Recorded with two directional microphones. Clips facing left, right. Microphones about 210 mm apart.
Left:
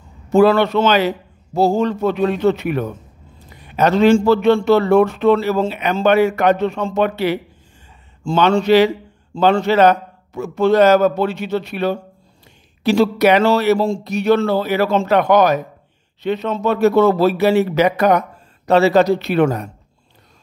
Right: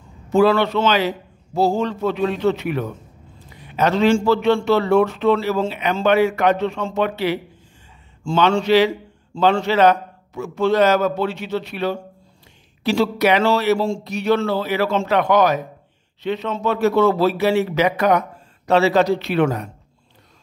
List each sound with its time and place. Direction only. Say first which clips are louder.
0.3 s a man's voice: left 3 dB; 50° left (ahead or behind)
8.2 s speech: left 2 dB; 35° left (ahead or behind)
8.5 s a man's voice: left 3 dB; 50° left (ahead or behind)